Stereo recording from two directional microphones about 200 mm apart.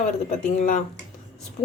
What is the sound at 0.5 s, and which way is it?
Speech, 40° left (ahead or behind).